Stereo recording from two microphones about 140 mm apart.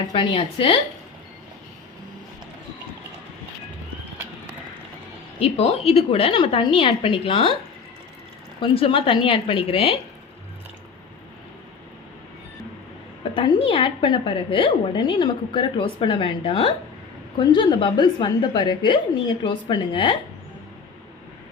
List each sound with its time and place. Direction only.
0.1 s a woman's voice: 35° left (ahead or behind)
5.4 s a woman's voice: 45° left (ahead or behind)
8.6 s a woman's voice: 40° left (ahead or behind)
13.3 s a woman's voice: 35° left (ahead or behind)